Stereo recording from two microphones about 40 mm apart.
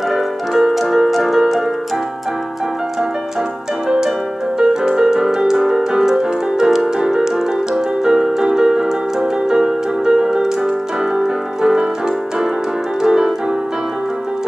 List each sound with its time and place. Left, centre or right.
0.1 s music: centre
4.6 s music: centre
7.7 s keyboard: centre
11.1 s piano: right
13.0 s music: centre